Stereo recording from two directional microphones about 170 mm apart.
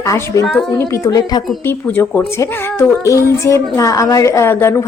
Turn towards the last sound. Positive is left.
turn(degrees=15)  # may be behind; listen again after turning